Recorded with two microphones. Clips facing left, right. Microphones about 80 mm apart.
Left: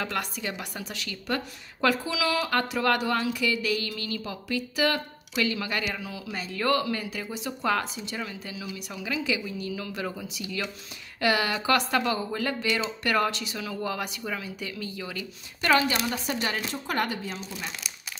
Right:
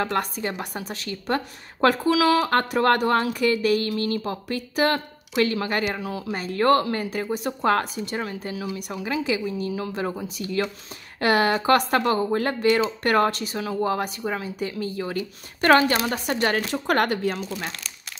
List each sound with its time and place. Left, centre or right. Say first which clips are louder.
0.0 s a woman's voice: right 6 dB; right
9.0 s a woman's voice: right 4 dB; right
15.7 s speech: right 5 dB; right